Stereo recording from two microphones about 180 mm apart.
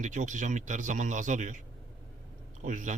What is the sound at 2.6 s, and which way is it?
Speech, 45° right (ahead or behind).